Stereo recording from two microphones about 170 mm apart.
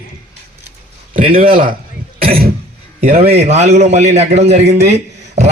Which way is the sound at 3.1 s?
35° right (ahead or behind).